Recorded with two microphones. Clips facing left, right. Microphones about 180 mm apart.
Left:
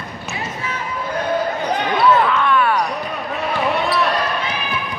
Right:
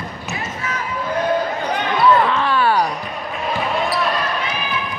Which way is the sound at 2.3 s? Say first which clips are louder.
Even; 30° right (ahead or behind).